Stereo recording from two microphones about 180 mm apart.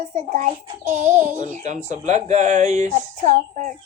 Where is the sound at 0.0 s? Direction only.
45° right (ahead or behind).